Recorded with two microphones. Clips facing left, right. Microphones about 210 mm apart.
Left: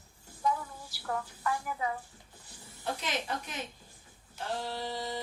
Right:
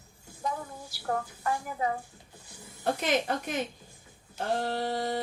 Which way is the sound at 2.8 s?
55° right (ahead or behind).